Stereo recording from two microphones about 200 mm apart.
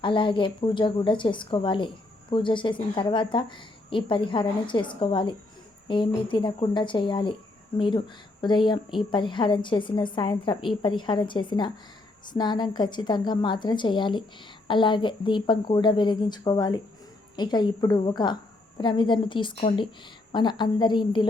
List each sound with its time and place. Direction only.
0.0 s a woman's voice: 25° left (ahead or behind)